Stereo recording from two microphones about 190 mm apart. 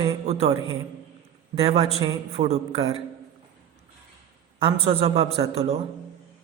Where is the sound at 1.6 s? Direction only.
30° right (ahead or behind).